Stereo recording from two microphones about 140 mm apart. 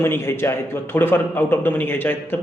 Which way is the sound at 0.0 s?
15° left (ahead or behind).